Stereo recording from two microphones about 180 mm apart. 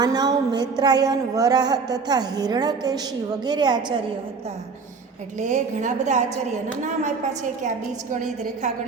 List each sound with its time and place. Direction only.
0.0 s a woman's voice: 20° right (ahead or behind)
5.4 s a woman's voice: 40° right (ahead or behind)